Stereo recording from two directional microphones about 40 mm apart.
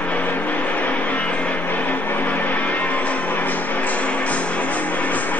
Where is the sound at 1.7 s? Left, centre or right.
Left.